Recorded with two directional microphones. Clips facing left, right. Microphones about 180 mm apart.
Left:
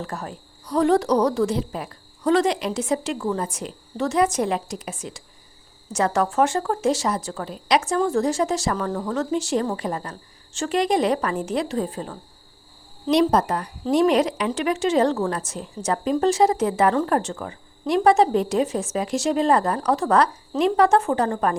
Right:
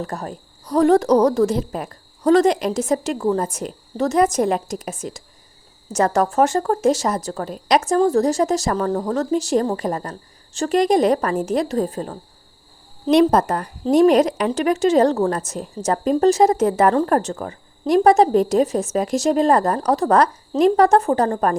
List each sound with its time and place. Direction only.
0.0 s a woman's voice: 40° right (ahead or behind)
13.1 s a woman's voice: 55° right (ahead or behind)